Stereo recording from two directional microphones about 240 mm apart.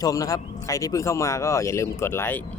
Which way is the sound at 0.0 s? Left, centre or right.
Centre.